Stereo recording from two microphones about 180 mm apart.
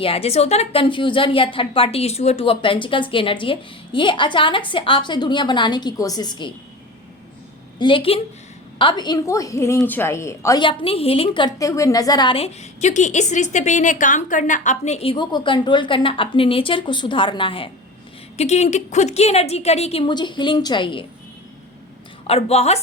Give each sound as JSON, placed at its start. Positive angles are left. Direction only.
{"t": 0.0, "sound": "a woman's voice", "side_deg": 35}
{"t": 7.8, "sound": "a woman's voice", "side_deg": 30}
{"t": 10.6, "sound": "a woman's voice", "side_deg": 30}
{"t": 22.3, "sound": "a woman's voice", "side_deg": 35}